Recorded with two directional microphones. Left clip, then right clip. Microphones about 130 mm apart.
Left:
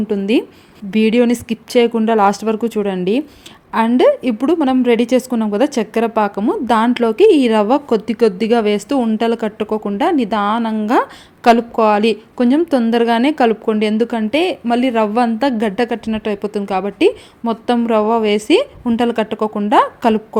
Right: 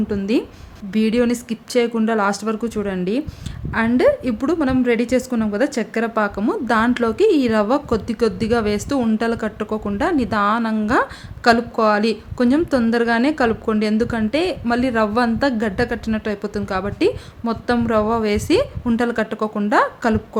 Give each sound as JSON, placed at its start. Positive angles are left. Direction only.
{"t": 0.1, "sound": "a woman's voice", "side_deg": 25}